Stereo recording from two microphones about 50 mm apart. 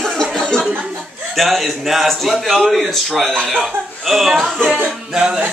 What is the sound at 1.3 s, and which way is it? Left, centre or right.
A man's voice, centre.